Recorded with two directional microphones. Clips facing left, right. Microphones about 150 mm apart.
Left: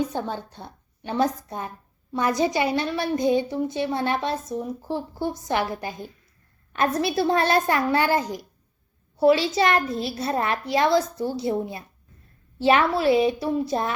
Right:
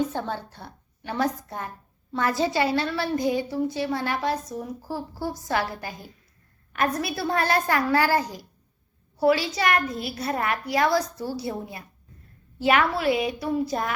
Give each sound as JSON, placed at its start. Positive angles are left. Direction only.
{"t": 0.0, "sound": "a woman's voice", "side_deg": 15}